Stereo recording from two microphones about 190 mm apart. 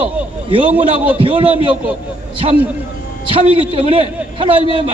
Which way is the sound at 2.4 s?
30° right (ahead or behind).